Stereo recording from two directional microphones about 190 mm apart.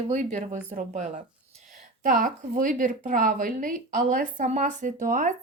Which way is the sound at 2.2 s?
45° right (ahead or behind).